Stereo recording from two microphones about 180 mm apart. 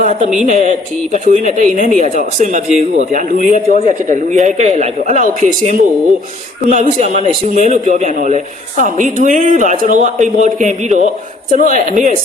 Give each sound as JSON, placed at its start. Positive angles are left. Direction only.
{"t": 0.0, "sound": "a woman's voice", "side_deg": -40}
{"t": 3.3, "sound": "speech", "side_deg": 40}
{"t": 4.1, "sound": "a woman's voice", "side_deg": -40}